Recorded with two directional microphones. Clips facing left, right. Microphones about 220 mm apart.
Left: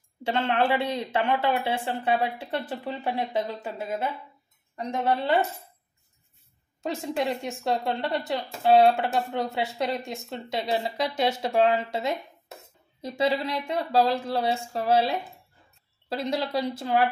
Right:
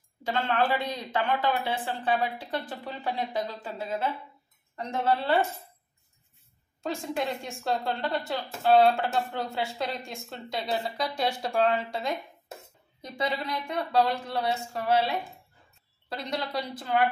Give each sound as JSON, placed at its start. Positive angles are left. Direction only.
{"t": 0.2, "sound": "a woman's voice", "side_deg": 25}
{"t": 6.8, "sound": "a woman's voice", "side_deg": 20}
{"t": 13.7, "sound": "a woman's voice", "side_deg": 30}